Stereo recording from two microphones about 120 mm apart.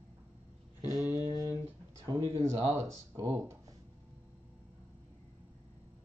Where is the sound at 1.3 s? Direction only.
35° left (ahead or behind).